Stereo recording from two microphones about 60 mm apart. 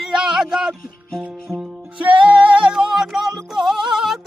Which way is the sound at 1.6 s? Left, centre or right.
Right.